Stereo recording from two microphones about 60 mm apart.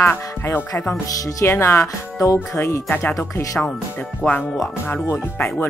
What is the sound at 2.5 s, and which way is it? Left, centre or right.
Speech, left.